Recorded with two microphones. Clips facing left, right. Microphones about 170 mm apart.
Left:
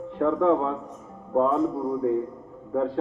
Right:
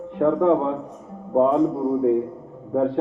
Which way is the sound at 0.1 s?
15° right (ahead or behind).